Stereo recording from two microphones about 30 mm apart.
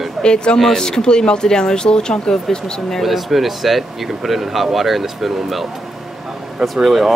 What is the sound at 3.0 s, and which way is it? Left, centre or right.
Speech, centre.